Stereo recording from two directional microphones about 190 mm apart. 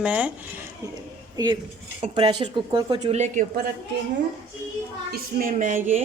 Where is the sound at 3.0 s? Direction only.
35° right (ahead or behind).